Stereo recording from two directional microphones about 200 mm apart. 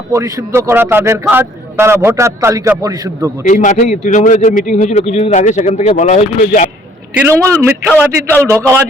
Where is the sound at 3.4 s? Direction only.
40° left (ahead or behind).